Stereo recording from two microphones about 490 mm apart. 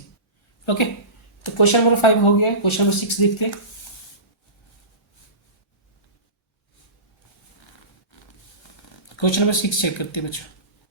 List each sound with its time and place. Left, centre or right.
0.6 s speech: left
9.1 s speech: left